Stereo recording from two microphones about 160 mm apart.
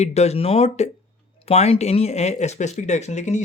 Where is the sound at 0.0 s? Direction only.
40° left (ahead or behind).